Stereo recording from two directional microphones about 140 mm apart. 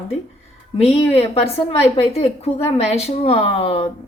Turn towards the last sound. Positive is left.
turn(degrees=40)  # may be behind; listen again after turning